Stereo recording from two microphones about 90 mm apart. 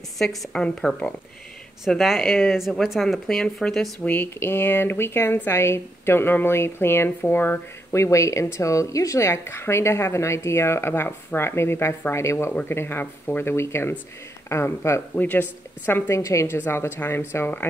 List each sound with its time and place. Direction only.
0.2 s speech: centre (ahead or behind)
1.9 s speech: centre (ahead or behind)
4.0 s speech: 20° left (ahead or behind)
16.1 s a woman's voice: 35° left (ahead or behind)